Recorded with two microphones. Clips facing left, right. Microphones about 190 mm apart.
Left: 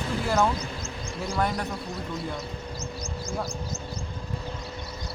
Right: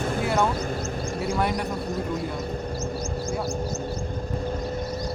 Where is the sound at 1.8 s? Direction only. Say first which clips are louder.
Right 6 dB; 45° right (ahead or behind).